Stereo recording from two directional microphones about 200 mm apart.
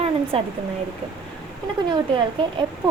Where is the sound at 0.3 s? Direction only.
30° right (ahead or behind).